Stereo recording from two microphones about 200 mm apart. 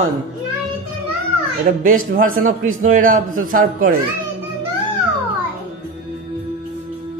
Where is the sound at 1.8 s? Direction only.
45° right (ahead or behind).